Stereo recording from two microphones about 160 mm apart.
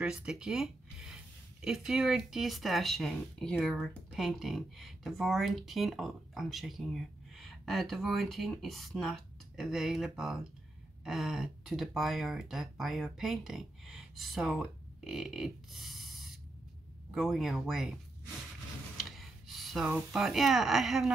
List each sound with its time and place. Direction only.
0.0 s speech: 5° right (ahead or behind)
19.0 s speech: centre (ahead or behind)